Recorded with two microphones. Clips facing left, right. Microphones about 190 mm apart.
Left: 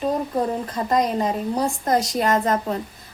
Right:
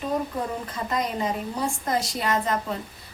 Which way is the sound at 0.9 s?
45° left (ahead or behind).